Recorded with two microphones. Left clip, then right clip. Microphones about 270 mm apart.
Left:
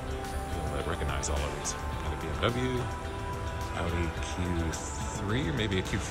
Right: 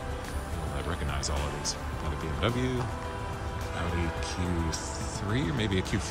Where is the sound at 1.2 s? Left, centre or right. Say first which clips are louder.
Right 1 dB; centre.